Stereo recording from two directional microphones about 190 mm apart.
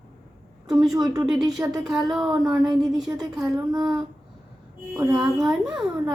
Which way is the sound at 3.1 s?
15° right (ahead or behind).